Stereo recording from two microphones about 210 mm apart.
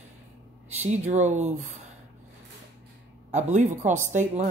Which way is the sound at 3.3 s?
35° right (ahead or behind).